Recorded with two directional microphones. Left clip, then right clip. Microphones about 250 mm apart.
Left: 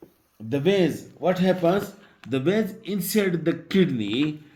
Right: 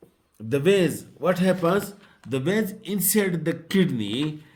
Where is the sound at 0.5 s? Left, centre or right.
Right.